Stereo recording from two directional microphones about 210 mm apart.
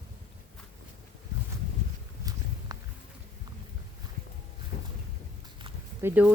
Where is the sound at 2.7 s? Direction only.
15° right (ahead or behind).